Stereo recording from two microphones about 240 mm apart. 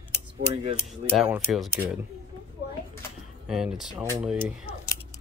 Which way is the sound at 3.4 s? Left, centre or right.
Centre.